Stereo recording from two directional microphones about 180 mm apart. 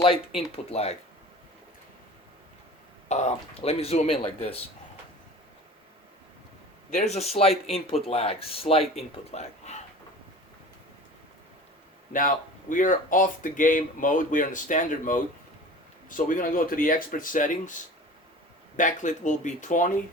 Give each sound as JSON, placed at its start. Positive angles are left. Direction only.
{"t": 0.3, "sound": "speech", "side_deg": 35}
{"t": 3.1, "sound": "speech", "side_deg": 40}
{"t": 6.9, "sound": "speech", "side_deg": 35}
{"t": 12.1, "sound": "speech", "side_deg": 50}
{"t": 18.8, "sound": "speech", "side_deg": 45}